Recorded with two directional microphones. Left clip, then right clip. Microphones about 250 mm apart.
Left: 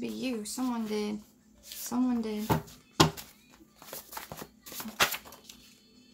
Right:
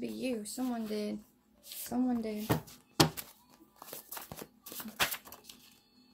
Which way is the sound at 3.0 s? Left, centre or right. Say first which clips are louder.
Left 3 dB; right.